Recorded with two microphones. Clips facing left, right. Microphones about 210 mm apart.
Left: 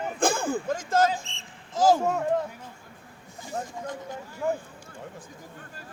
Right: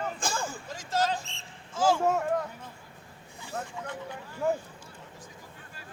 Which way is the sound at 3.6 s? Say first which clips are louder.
Left 3 dB; 40° left (ahead or behind).